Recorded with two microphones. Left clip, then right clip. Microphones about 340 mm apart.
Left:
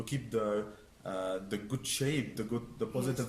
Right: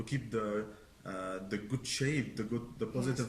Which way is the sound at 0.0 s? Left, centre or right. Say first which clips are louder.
Left 2 dB; centre.